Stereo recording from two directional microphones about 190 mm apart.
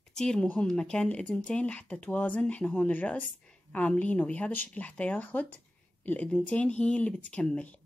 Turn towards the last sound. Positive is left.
turn(degrees=5)  # may be behind; listen again after turning